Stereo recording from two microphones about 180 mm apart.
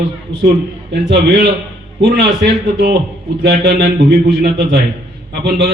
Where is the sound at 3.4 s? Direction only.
65° right (ahead or behind).